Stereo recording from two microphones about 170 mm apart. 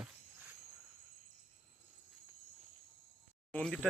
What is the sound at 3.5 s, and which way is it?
Speech, 5° left (ahead or behind).